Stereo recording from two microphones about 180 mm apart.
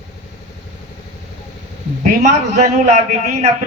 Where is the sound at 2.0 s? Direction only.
40° right (ahead or behind).